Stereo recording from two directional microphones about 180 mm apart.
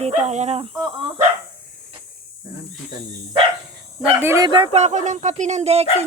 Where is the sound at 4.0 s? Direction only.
10° right (ahead or behind).